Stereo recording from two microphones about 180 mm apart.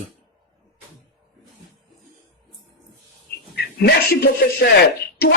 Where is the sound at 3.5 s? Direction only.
65° left (ahead or behind).